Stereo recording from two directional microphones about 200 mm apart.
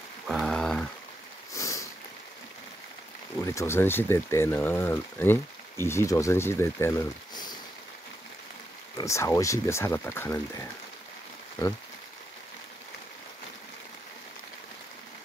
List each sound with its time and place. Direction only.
0.3 s a sound: centre (ahead or behind)
1.5 s sniff: 15° left (ahead or behind)
3.3 s speech: 15° left (ahead or behind)
8.9 s speech: 15° left (ahead or behind)